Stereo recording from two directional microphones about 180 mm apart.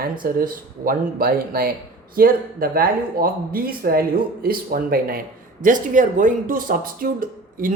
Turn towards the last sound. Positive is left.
turn(degrees=-50)  # may be behind; listen again after turning